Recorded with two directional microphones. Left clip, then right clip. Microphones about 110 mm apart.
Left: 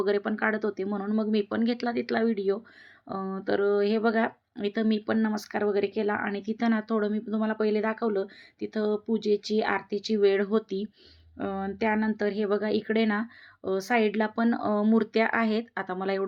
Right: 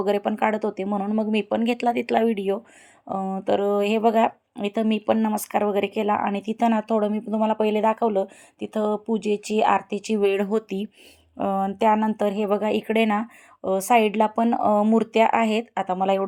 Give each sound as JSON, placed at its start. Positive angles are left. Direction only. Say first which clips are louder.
{"t": 0.0, "sound": "speech", "louder": "right 4 dB", "side_deg": -35}
{"t": 0.9, "sound": "speech", "louder": "right 5 dB", "side_deg": -25}
{"t": 8.5, "sound": "speech", "louder": "right 4 dB", "side_deg": -45}
{"t": 10.2, "sound": "speech", "louder": "right 2 dB", "side_deg": -30}